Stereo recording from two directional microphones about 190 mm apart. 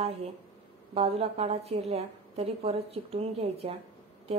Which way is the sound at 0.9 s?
30° right (ahead or behind).